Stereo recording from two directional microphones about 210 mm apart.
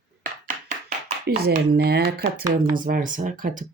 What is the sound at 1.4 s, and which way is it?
Speech, 50° right (ahead or behind).